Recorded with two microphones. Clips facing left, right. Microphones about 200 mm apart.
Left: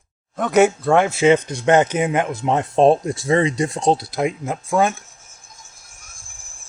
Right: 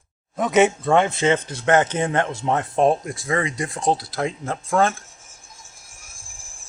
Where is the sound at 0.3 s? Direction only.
Centre (ahead or behind).